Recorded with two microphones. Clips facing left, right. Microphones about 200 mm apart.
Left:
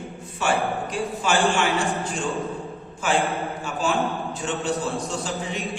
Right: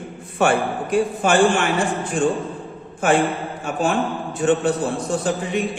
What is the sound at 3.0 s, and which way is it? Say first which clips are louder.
A man's voice: right 5 dB; 55° right (ahead or behind).